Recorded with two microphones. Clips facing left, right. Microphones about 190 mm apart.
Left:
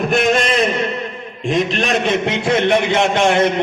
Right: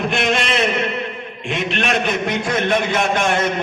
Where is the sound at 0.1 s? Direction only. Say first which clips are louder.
Left 4 dB; 40° left (ahead or behind).